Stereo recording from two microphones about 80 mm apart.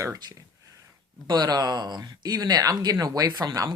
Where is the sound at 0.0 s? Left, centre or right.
Right.